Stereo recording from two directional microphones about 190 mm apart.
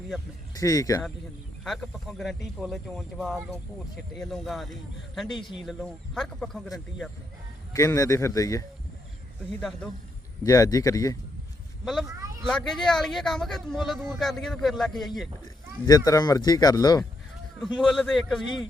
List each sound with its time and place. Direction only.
0.5 s speech: 20° left (ahead or behind)
1.6 s speech: centre (ahead or behind)
7.7 s speech: 15° left (ahead or behind)
9.6 s speech: centre (ahead or behind)
10.4 s speech: 20° left (ahead or behind)
12.5 s speech: centre (ahead or behind)
15.9 s speech: 20° left (ahead or behind)
17.7 s speech: centre (ahead or behind)